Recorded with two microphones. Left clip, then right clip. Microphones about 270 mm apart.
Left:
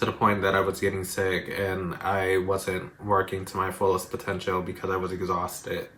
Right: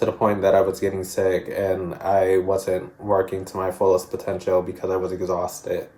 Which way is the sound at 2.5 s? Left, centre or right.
Left.